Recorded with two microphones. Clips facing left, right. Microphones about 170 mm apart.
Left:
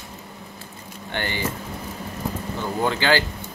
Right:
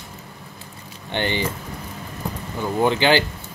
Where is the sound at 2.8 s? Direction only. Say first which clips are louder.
Right 4 dB; 20° right (ahead or behind).